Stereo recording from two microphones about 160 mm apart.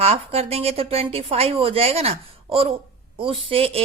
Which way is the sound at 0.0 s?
40° right (ahead or behind).